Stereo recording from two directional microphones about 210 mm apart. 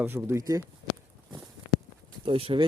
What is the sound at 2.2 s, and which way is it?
Speech, 25° right (ahead or behind).